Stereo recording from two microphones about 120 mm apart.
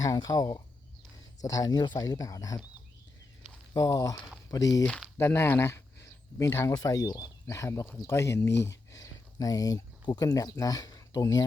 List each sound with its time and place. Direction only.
0.0 s speech: 30° left (ahead or behind)
3.8 s speech: 30° left (ahead or behind)
4.8 s speech: 10° left (ahead or behind)
5.1 s speech: 20° left (ahead or behind)